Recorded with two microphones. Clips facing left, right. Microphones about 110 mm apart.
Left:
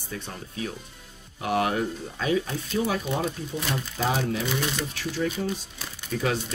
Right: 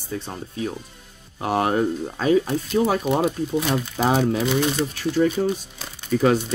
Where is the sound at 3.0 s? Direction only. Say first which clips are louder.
Right 7 dB; 70° right (ahead or behind).